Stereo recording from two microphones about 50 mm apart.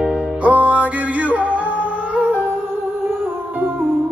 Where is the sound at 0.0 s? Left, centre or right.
Right.